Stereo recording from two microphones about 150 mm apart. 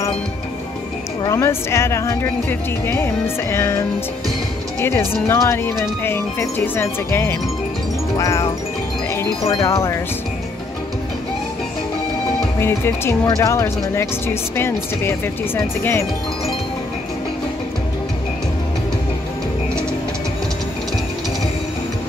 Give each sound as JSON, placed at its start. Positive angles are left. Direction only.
{"t": 1.2, "sound": "speech", "side_deg": 20}
{"t": 9.4, "sound": "wind chime", "side_deg": 40}
{"t": 9.7, "sound": "speech", "side_deg": 20}
{"t": 12.5, "sound": "speech", "side_deg": 15}